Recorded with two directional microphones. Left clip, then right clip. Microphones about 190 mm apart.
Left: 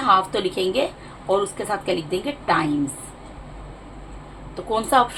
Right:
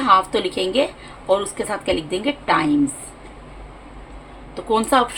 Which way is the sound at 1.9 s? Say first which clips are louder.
Right 3 dB; 30° right (ahead or behind).